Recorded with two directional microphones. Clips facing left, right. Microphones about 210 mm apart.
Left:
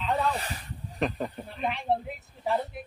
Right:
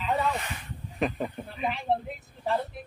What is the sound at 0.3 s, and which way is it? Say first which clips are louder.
Speech: even; 35° left (ahead or behind).